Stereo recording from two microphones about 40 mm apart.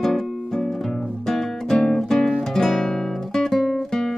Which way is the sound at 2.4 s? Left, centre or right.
Centre.